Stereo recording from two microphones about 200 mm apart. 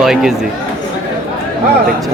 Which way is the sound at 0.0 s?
5° right (ahead or behind).